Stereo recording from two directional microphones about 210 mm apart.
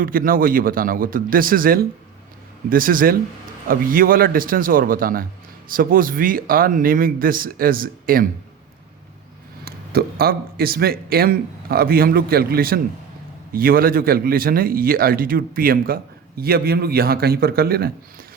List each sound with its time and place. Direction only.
0.0 s speech: 40° right (ahead or behind)
9.6 s speech: 45° right (ahead or behind)